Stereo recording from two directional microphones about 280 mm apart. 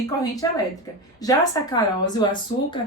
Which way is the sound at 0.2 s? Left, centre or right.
Centre.